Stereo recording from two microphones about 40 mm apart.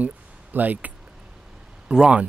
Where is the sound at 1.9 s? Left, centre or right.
Right.